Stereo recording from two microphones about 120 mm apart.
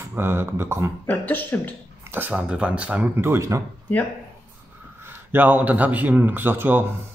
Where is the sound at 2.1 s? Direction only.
15° right (ahead or behind).